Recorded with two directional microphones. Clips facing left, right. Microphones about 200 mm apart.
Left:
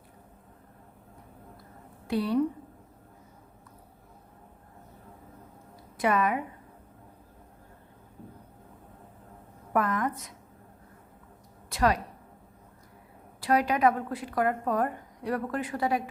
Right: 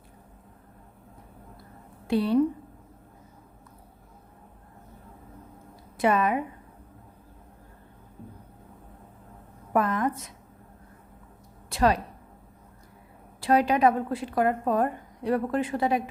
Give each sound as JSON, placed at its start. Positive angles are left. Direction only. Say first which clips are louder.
{"t": 2.0, "sound": "a woman's voice", "louder": "right 4 dB", "side_deg": -25}
{"t": 6.0, "sound": "a woman's voice", "louder": "right 3 dB", "side_deg": -25}
{"t": 9.7, "sound": "a woman's voice", "louder": "right 2 dB", "side_deg": -25}
{"t": 11.7, "sound": "a sound", "louder": "right 3 dB", "side_deg": -30}
{"t": 13.4, "sound": "a woman's voice", "louder": "right 3 dB", "side_deg": -25}